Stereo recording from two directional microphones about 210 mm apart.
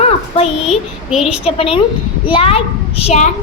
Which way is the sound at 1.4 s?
25° left (ahead or behind).